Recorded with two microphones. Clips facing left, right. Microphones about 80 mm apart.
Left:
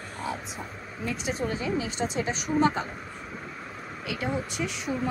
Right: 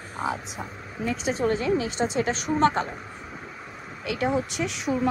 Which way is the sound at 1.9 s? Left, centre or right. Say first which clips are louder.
Right 4 dB; right.